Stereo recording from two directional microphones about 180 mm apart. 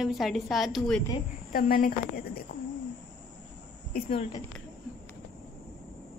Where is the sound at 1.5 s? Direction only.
55° left (ahead or behind).